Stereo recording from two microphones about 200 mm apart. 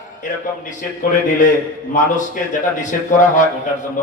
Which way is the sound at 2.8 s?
40° left (ahead or behind).